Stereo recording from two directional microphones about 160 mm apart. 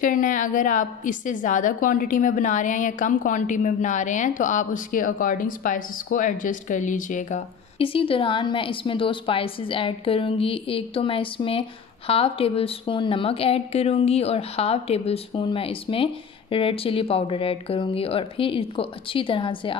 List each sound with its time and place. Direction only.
0.0 s a woman's voice: 55° left (ahead or behind)
7.8 s a woman's voice: 35° left (ahead or behind)